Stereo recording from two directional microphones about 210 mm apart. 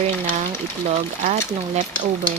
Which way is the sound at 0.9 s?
35° right (ahead or behind).